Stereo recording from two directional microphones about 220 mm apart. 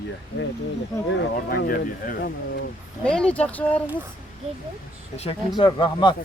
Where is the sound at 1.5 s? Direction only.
40° left (ahead or behind).